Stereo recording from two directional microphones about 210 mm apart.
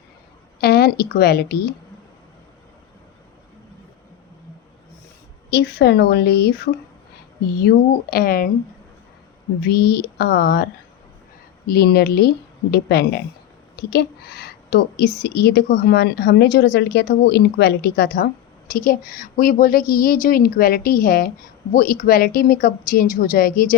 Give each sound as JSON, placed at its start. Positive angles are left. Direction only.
{"t": 0.6, "sound": "a woman's voice", "side_deg": 50}
{"t": 5.5, "sound": "a woman's voice", "side_deg": 50}
{"t": 9.6, "sound": "a woman's voice", "side_deg": 50}
{"t": 11.7, "sound": "a woman's voice", "side_deg": 50}